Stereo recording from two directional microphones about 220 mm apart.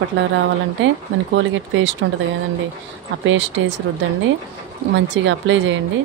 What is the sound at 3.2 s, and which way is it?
Speech, 60° right (ahead or behind).